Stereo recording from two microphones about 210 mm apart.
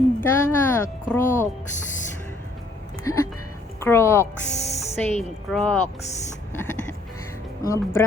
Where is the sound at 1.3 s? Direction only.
40° left (ahead or behind).